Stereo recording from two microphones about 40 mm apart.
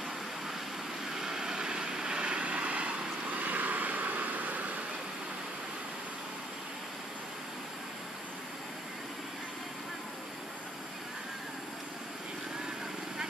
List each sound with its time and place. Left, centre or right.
1.1 s vehicle: centre; by 3.4 s right
3.4 s vehicle: right